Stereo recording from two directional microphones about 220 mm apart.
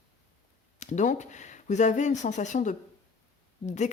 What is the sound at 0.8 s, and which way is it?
A woman's voice, 30° left (ahead or behind).